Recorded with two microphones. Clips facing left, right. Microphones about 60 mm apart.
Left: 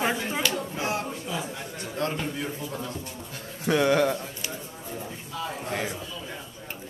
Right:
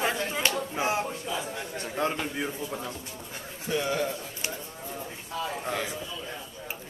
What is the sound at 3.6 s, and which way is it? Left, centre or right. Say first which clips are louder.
Speech: left 7 dB; left.